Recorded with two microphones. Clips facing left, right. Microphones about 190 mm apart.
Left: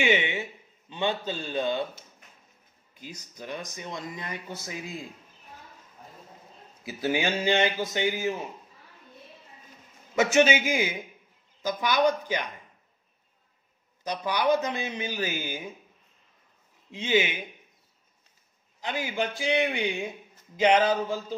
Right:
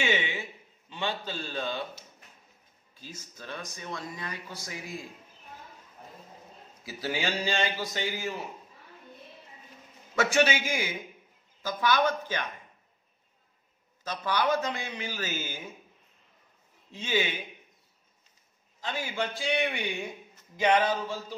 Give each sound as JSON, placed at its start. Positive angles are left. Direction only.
{"t": 0.0, "sound": "a sound", "side_deg": 20}
{"t": 0.8, "sound": "speech", "side_deg": 20}
{"t": 2.9, "sound": "speech", "side_deg": 15}
{"t": 6.8, "sound": "speech", "side_deg": 20}
{"t": 10.1, "sound": "speech", "side_deg": 20}
{"t": 14.0, "sound": "speech", "side_deg": 15}
{"t": 16.9, "sound": "speech", "side_deg": 20}
{"t": 18.8, "sound": "speech", "side_deg": 20}